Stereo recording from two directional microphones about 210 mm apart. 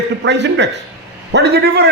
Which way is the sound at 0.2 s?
55° right (ahead or behind).